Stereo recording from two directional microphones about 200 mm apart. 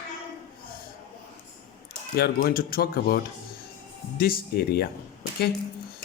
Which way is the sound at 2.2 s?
50° left (ahead or behind).